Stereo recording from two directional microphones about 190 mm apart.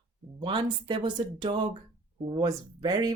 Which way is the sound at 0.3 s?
25° right (ahead or behind).